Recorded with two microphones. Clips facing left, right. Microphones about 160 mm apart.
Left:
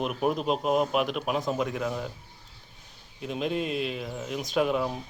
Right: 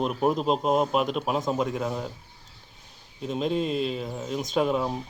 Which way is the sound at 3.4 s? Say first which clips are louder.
Right 3 dB; 5° left (ahead or behind).